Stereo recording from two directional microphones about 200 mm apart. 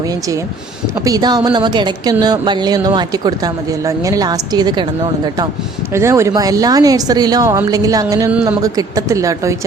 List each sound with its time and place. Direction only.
1.0 s speech: 20° right (ahead or behind)